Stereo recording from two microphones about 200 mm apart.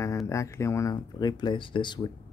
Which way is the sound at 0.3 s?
15° left (ahead or behind).